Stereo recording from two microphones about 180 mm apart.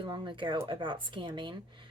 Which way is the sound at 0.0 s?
25° right (ahead or behind).